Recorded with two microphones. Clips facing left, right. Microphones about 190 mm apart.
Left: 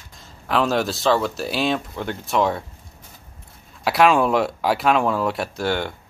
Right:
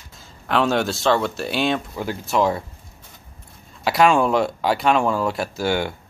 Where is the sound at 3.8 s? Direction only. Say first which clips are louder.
Even; centre (ahead or behind).